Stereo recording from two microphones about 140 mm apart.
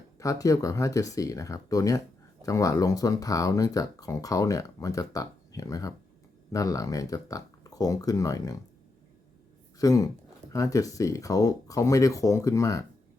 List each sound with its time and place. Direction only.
0.2 s speech: 25° left (ahead or behind)
9.7 s speech: 25° left (ahead or behind)